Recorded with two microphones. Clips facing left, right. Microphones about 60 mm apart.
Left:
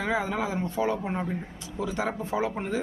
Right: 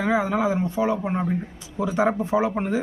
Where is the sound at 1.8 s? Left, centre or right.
Right.